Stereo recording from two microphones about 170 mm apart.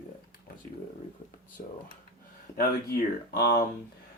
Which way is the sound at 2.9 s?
65° left (ahead or behind).